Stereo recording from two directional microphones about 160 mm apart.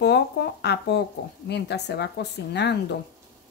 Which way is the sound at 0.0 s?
90° left.